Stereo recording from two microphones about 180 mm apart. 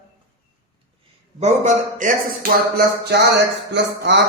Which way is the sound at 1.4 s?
40° right (ahead or behind).